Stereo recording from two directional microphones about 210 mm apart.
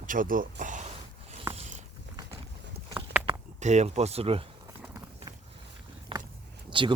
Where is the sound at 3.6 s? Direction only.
35° right (ahead or behind).